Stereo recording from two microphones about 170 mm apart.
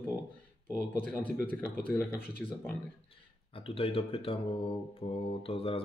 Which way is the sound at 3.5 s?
35° left (ahead or behind).